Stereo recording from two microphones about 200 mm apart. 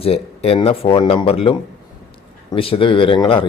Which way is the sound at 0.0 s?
30° left (ahead or behind).